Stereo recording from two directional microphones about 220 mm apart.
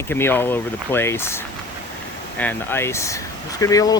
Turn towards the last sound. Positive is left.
turn(degrees=15)  # may be behind; listen again after turning